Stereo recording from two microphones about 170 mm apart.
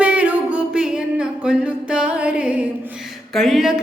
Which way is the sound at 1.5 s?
5° right (ahead or behind).